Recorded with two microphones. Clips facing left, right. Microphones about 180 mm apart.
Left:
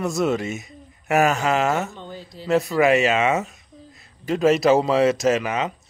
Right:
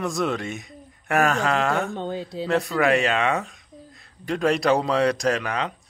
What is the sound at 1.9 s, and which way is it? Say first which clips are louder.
Speech: right 8 dB; 65° right (ahead or behind).